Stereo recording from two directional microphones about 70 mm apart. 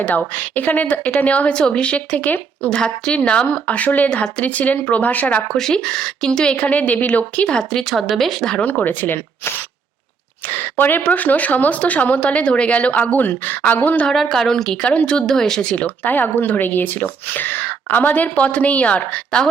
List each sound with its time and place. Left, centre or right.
0.3 s speech: left
5.5 s speech: centre
7.9 s speech: centre
8.6 s speech: left
14.1 s speech: centre
15.7 s speech: left